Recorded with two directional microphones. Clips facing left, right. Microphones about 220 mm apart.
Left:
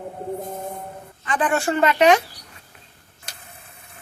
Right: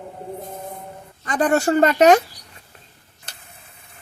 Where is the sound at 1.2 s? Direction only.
40° right (ahead or behind).